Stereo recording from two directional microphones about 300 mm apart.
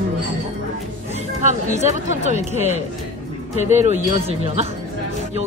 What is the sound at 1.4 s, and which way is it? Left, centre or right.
Speech, right.